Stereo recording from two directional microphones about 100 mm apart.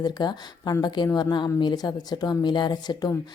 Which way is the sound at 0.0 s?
45° left (ahead or behind).